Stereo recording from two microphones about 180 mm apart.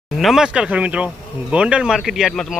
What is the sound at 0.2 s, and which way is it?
Speech, centre (ahead or behind).